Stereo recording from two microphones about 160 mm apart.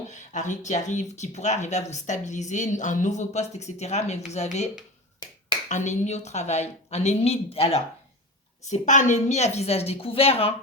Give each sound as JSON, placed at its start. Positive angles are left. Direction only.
{"t": 0.1, "sound": "speech", "side_deg": 50}
{"t": 5.6, "sound": "speech", "side_deg": 50}
{"t": 8.6, "sound": "a woman's voice", "side_deg": 50}